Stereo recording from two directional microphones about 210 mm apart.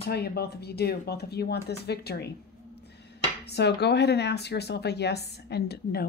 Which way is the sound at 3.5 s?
50° left (ahead or behind).